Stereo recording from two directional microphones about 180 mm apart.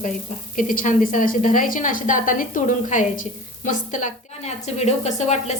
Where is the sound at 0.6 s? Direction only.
45° left (ahead or behind).